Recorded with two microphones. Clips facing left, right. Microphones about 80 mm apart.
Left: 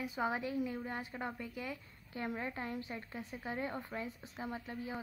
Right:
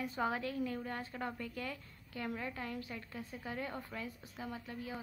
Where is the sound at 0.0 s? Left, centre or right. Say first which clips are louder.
Even; centre.